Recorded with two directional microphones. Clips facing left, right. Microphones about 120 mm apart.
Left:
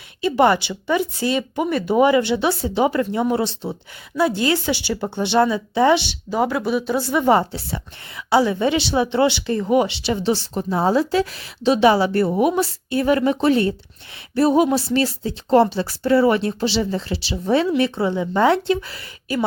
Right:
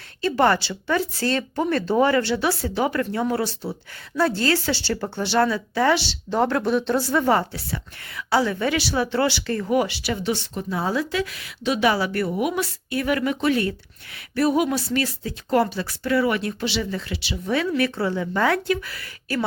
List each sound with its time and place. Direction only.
0.2 s speech: 15° left (ahead or behind)
6.3 s speech: 5° left (ahead or behind)
7.1 s a woman's voice: 15° left (ahead or behind)